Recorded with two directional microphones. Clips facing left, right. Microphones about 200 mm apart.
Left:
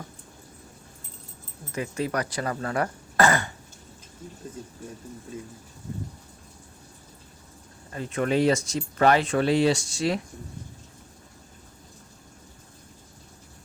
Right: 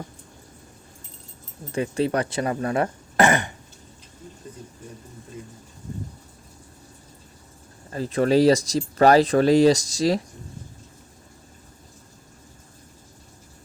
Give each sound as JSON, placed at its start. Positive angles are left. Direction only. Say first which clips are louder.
{"t": 1.7, "sound": "speech", "louder": "right 5 dB", "side_deg": -30}
{"t": 7.9, "sound": "speech", "louder": "right 5 dB", "side_deg": -35}